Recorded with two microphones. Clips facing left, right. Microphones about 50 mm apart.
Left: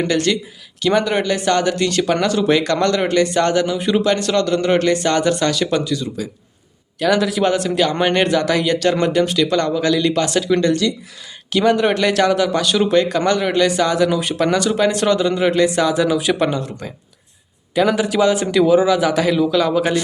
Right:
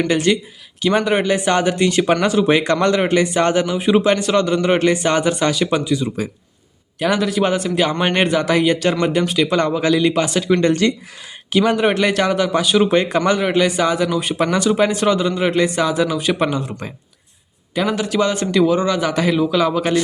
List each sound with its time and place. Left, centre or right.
0.1 s a man's voice: centre
7.2 s a man's voice: centre
10.5 s speech: right
11.5 s a man's voice: centre
17.7 s speech: centre